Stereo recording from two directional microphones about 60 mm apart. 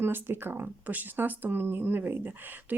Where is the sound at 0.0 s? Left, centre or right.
Right.